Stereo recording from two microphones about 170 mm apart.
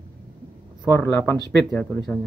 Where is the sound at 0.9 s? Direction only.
15° left (ahead or behind).